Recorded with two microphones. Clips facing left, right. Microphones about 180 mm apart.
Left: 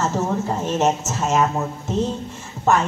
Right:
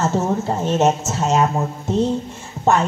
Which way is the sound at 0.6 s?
30° right (ahead or behind).